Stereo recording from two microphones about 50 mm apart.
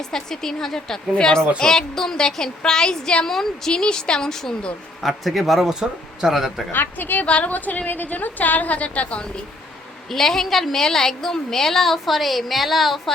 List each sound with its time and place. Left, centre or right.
0.1 s a woman's voice: centre
5.0 s a woman's voice: centre
6.2 s speech: centre
6.7 s a woman's voice: left
7.3 s a woman's voice: left
7.5 s a woman's voice: left
10.1 s a woman's voice: centre